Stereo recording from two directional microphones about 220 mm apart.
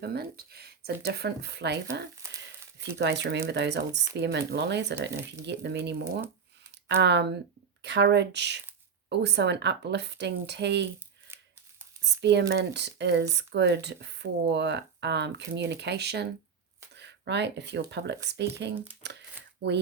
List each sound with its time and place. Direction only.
0.0 s speech: 45° right (ahead or behind)
12.2 s speech: 50° right (ahead or behind)